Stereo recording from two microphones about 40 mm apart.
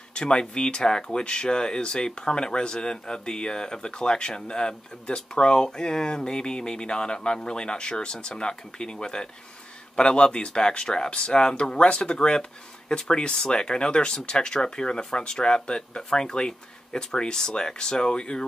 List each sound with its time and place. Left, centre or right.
0.1 s speech: left